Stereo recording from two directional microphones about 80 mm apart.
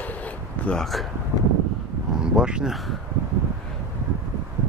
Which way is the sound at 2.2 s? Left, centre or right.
Centre.